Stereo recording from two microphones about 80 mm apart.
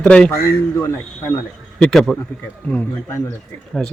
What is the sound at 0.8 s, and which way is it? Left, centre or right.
Speech, left.